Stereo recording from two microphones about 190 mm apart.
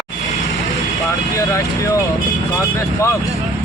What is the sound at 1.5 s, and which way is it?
A man's voice, 15° left (ahead or behind).